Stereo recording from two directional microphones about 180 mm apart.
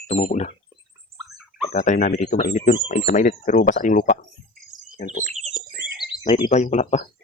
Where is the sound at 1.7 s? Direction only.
45° left (ahead or behind).